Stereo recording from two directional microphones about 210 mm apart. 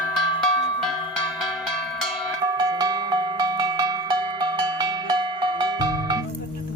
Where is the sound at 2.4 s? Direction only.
20° right (ahead or behind).